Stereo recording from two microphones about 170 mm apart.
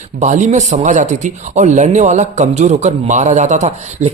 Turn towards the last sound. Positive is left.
turn(degrees=-40)  # may be behind; listen again after turning